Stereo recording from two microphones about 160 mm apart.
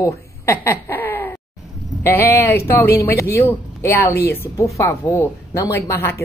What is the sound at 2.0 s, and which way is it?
A woman's voice, 15° left (ahead or behind).